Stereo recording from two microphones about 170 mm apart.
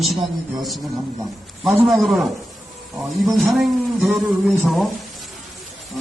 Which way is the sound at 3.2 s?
Centre (ahead or behind).